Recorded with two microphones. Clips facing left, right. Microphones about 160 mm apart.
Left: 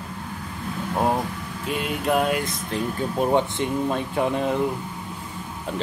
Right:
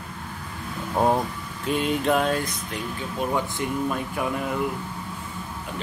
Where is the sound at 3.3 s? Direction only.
25° left (ahead or behind).